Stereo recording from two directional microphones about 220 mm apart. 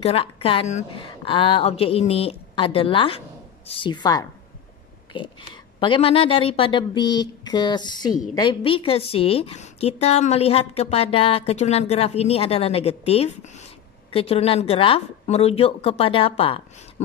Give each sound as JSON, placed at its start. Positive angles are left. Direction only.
{"t": 0.0, "sound": "a woman's voice", "side_deg": 25}